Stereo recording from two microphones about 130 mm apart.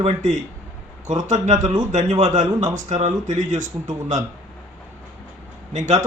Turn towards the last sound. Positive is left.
turn(degrees=-65)  # may be behind; listen again after turning